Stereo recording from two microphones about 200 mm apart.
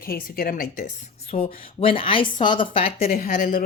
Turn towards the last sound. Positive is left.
turn(degrees=45)  # may be behind; listen again after turning